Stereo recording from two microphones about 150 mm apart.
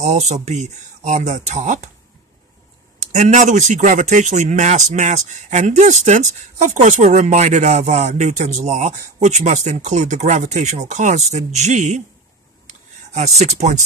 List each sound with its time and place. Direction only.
0.0 s speech: 50° right (ahead or behind)
3.1 s speech: 55° right (ahead or behind)
12.6 s a sound: 50° right (ahead or behind)